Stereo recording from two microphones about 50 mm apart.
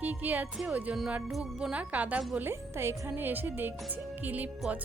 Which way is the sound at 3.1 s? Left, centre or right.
Right.